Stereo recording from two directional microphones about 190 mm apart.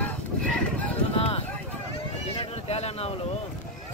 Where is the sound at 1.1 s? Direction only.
30° left (ahead or behind).